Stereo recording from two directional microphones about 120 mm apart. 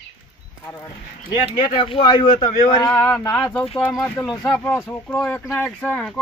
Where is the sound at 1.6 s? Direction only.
45° left (ahead or behind).